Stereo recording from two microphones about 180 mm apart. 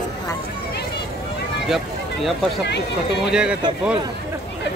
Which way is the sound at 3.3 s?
5° right (ahead or behind).